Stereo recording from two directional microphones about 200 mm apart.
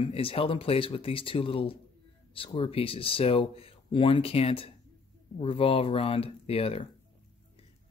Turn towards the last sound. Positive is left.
turn(degrees=30)  # may be behind; listen again after turning